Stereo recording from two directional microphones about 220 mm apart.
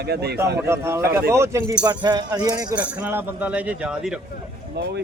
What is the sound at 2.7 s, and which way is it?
Speech, 5° right (ahead or behind).